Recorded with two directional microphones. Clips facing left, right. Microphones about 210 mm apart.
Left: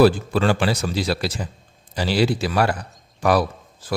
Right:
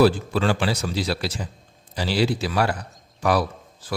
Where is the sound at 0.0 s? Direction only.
55° left (ahead or behind).